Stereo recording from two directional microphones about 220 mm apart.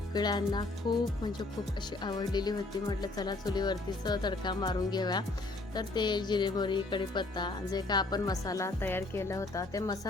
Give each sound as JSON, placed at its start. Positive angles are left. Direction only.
{"t": 0.1, "sound": "speech", "side_deg": 20}